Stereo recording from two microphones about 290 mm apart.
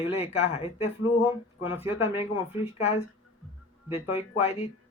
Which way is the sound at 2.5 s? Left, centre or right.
Left.